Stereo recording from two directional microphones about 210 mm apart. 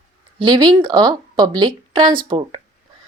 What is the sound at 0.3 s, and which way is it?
A woman's voice, 20° right (ahead or behind).